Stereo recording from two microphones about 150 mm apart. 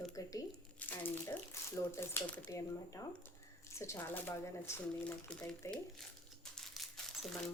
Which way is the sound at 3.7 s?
20° left (ahead or behind).